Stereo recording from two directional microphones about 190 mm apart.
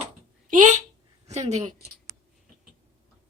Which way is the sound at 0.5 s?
40° right (ahead or behind).